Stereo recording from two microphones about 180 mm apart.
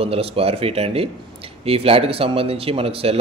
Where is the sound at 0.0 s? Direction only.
35° right (ahead or behind).